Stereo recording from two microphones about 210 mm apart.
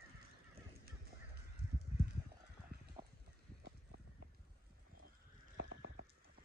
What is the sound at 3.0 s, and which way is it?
Clip-clop, 25° right (ahead or behind).